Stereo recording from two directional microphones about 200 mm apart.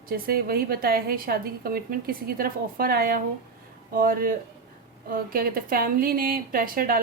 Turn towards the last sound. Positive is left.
turn(degrees=-45)  # may be behind; listen again after turning